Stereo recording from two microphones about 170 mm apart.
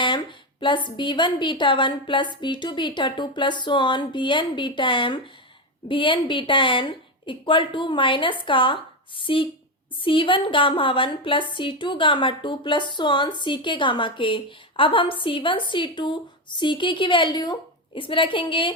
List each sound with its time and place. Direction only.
0.0 s a woman's voice: 30° left (ahead or behind)